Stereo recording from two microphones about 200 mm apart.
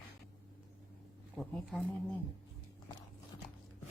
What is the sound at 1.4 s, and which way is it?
Speech, 5° left (ahead or behind).